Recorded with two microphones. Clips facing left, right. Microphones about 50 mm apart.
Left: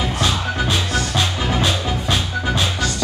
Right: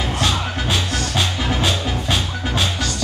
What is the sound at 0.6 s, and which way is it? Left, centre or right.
Music, left.